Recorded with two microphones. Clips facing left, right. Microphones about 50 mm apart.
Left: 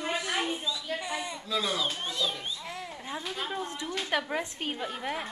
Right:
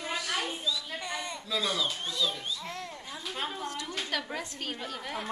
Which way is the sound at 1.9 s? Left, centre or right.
Left.